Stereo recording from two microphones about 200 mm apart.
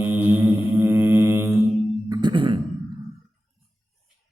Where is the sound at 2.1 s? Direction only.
20° right (ahead or behind).